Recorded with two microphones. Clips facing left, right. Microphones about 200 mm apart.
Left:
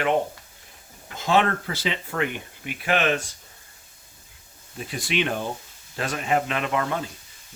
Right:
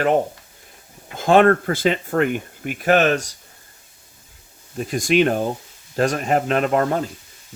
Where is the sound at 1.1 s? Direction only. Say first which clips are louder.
Right 8 dB; 50° right (ahead or behind).